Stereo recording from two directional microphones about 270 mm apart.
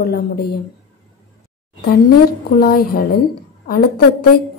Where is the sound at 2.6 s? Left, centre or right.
Left.